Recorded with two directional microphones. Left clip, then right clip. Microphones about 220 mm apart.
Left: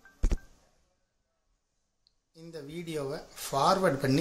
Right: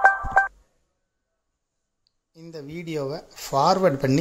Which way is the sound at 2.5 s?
30° right (ahead or behind).